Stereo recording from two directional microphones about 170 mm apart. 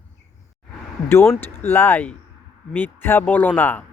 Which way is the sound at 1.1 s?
15° left (ahead or behind).